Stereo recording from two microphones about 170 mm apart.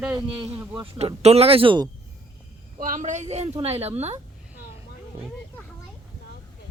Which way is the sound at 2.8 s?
50° right (ahead or behind).